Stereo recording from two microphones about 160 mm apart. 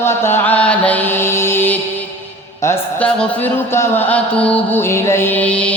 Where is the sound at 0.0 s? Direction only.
15° left (ahead or behind).